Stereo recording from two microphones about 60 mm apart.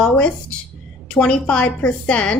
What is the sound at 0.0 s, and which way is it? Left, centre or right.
A woman's voice, centre.